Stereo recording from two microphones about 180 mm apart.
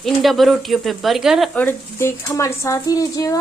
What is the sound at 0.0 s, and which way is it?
A woman's voice, centre (ahead or behind).